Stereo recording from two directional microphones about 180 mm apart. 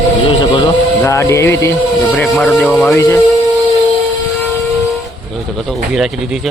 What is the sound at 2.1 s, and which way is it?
Speech, centre (ahead or behind).